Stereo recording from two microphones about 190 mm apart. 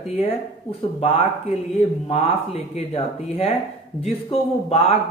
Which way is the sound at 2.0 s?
30° left (ahead or behind).